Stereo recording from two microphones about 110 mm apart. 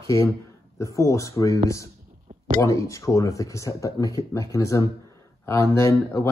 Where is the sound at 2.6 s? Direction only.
30° left (ahead or behind).